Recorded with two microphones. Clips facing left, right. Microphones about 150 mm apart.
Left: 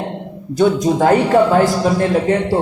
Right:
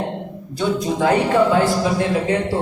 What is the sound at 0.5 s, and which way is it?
Speech, 45° left (ahead or behind).